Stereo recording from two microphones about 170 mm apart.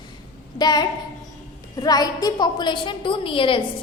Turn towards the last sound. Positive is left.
turn(degrees=30)  # may be behind; listen again after turning